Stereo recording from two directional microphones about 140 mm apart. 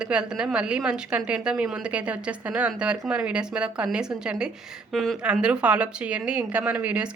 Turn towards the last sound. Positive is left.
turn(degrees=-10)  # may be behind; listen again after turning